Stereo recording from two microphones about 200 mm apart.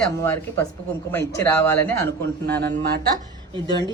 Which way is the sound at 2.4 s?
55° right (ahead or behind).